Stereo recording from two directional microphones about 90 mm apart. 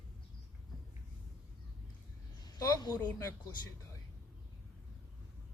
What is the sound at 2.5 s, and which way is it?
Speech, 40° left (ahead or behind).